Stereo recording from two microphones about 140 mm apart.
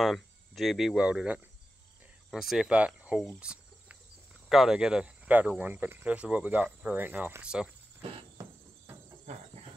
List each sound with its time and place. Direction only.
0.0 s speech: centre (ahead or behind)
3.3 s cricket: 10° right (ahead or behind)
4.5 s speech: 5° right (ahead or behind)
8.4 s cricket: 20° right (ahead or behind)